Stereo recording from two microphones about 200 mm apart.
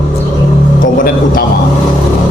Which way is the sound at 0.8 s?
45° left (ahead or behind).